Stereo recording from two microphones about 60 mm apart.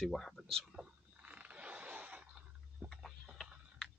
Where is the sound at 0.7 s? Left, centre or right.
Right.